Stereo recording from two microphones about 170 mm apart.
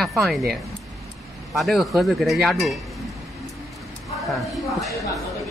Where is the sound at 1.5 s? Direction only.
Centre (ahead or behind).